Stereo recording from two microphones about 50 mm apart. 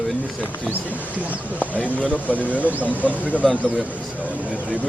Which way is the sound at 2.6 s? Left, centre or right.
Right.